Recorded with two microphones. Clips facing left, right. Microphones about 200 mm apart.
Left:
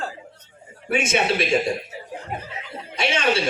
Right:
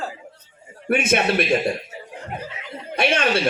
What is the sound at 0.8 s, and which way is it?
Speech, 55° right (ahead or behind).